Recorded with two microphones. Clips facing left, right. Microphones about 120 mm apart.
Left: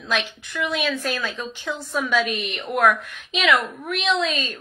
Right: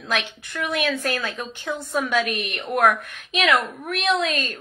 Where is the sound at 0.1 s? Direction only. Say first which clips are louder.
Left 1 dB; 60° right (ahead or behind).